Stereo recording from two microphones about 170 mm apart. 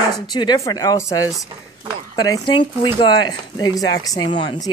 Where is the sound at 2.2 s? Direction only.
25° left (ahead or behind).